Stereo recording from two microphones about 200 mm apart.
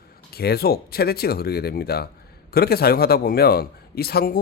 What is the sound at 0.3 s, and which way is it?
A man's voice, 50° left (ahead or behind).